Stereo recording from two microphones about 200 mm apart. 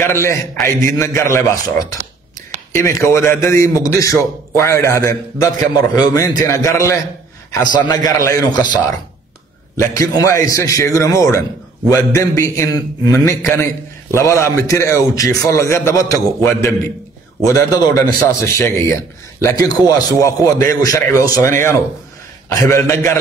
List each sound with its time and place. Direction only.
0.0 s a man's voice: 15° left (ahead or behind)
17.5 s a man's voice: 15° left (ahead or behind)